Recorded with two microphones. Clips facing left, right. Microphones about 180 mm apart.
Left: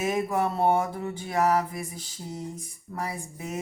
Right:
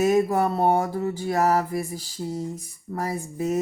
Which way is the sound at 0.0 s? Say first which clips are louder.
Right 6 dB; 40° right (ahead or behind).